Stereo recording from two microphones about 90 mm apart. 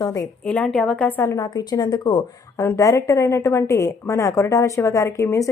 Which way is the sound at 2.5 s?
35° left (ahead or behind).